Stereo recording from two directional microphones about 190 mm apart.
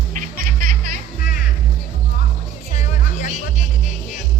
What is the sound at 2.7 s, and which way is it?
Music, 40° left (ahead or behind).